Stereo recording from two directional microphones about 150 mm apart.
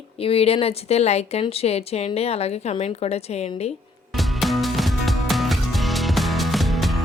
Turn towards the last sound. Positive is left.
turn(degrees=0)  # may be behind; listen again after turning